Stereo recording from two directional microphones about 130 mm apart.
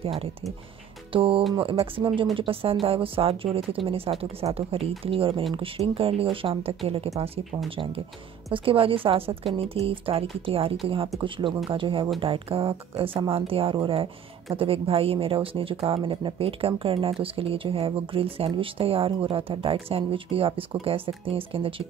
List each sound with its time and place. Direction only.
0.0 s a woman's voice: 45° right (ahead or behind)